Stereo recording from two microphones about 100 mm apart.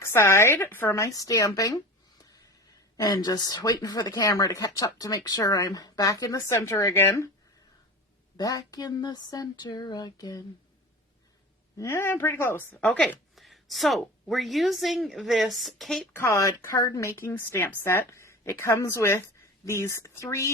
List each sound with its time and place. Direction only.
0.0 s speech: 25° left (ahead or behind)
8.4 s speech: 40° left (ahead or behind)
11.8 s a woman's voice: 25° left (ahead or behind)
13.3 s a woman's voice: centre (ahead or behind)
16.1 s a woman's voice: 30° left (ahead or behind)